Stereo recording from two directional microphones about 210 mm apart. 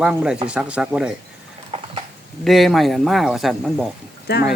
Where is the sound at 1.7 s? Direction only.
30° right (ahead or behind).